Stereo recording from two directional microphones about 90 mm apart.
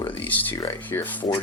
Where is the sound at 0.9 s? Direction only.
40° left (ahead or behind).